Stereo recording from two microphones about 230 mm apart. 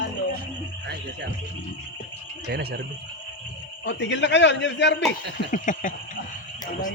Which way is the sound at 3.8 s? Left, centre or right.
Left.